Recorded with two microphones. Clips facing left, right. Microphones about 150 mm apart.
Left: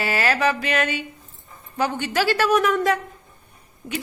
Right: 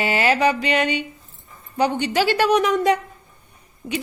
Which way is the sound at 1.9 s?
45° left (ahead or behind).